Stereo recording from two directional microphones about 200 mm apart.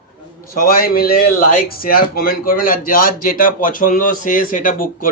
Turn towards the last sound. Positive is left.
turn(degrees=45)  # may be behind; listen again after turning